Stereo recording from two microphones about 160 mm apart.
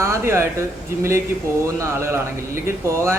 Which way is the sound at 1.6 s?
15° right (ahead or behind).